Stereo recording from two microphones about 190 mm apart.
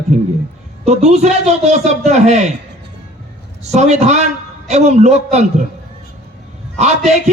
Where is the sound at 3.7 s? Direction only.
35° right (ahead or behind).